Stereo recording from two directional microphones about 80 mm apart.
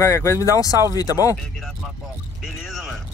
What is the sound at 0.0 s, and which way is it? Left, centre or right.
Speech, left.